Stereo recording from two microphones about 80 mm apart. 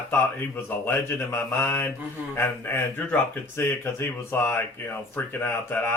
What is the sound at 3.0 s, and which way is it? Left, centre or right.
Speech, centre.